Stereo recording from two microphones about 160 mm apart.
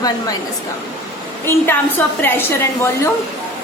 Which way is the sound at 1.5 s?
15° left (ahead or behind).